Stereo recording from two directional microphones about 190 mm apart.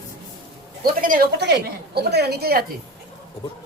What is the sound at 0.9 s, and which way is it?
Speech, 50° right (ahead or behind).